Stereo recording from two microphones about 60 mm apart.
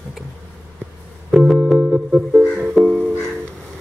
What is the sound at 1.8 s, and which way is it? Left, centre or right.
Music, centre.